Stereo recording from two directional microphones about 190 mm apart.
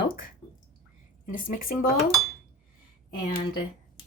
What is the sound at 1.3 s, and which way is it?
Speech, 50° left (ahead or behind).